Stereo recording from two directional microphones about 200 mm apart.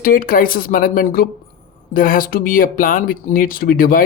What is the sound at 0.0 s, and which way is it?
Speech, 45° left (ahead or behind).